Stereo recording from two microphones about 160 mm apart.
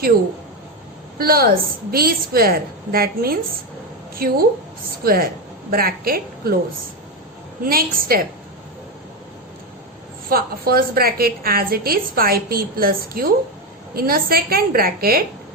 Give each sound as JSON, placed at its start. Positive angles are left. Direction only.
{"t": 1.2, "sound": "a woman's voice", "side_deg": -70}
{"t": 7.6, "sound": "a woman's voice", "side_deg": -65}
{"t": 10.2, "sound": "a woman's voice", "side_deg": -65}